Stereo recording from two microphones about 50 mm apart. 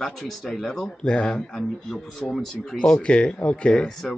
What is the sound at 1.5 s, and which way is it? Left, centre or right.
Speech, centre.